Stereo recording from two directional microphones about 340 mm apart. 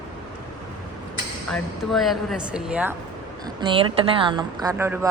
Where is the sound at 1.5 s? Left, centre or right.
Centre.